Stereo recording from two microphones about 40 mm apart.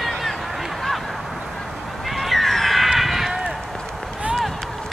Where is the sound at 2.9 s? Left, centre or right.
Centre.